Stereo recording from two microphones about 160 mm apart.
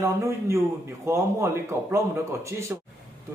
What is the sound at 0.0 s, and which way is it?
A man's voice, 15° right (ahead or behind).